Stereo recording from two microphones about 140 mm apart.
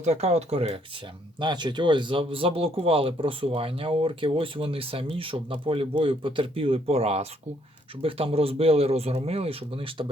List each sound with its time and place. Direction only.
0.0 s a man's voice: 50° right (ahead or behind)
1.4 s a man's voice: 35° right (ahead or behind)